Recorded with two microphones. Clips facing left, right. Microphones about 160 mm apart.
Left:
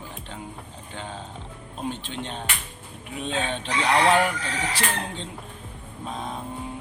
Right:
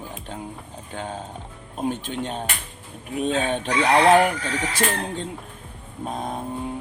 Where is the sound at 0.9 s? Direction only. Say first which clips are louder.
Right 5 dB; 45° right (ahead or behind).